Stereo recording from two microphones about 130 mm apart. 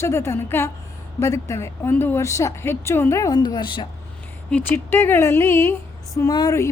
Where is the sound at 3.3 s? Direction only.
35° left (ahead or behind).